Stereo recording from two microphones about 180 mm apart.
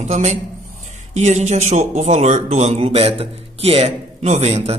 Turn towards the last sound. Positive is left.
turn(degrees=-35)  # may be behind; listen again after turning